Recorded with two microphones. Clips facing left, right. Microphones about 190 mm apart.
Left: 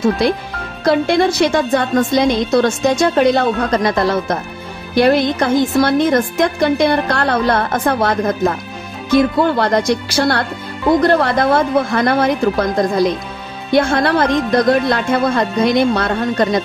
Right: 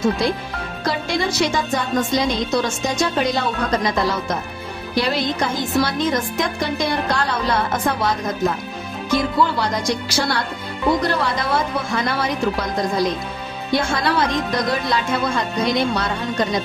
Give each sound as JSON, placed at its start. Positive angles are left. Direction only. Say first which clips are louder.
{"t": 0.8, "sound": "speech", "louder": "left 9 dB", "side_deg": 55}
{"t": 13.7, "sound": "speech", "louder": "left 6 dB", "side_deg": 55}